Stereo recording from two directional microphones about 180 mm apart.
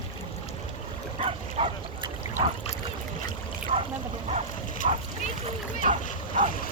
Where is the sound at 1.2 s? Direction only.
35° right (ahead or behind).